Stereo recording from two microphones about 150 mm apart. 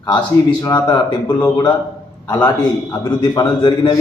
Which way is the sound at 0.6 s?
25° left (ahead or behind).